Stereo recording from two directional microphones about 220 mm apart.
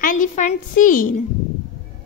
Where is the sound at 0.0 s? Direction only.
35° left (ahead or behind).